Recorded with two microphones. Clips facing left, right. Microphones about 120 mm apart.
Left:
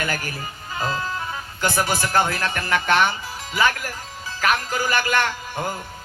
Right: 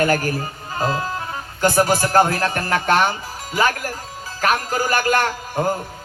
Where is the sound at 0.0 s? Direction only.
40° right (ahead or behind).